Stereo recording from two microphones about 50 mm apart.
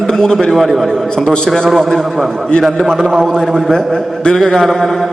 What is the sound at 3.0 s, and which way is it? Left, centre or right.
Speech, centre.